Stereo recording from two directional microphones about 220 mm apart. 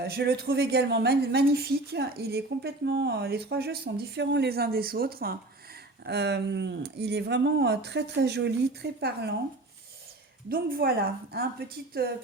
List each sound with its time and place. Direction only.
0.0 s a woman's voice: 45° right (ahead or behind)
10.5 s a woman's voice: 45° right (ahead or behind)